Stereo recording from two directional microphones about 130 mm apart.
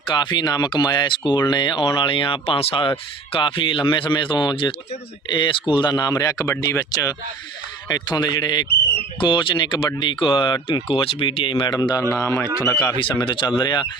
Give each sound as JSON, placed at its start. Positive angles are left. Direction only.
{"t": 0.1, "sound": "speech", "side_deg": 35}
{"t": 13.0, "sound": "speech", "side_deg": 40}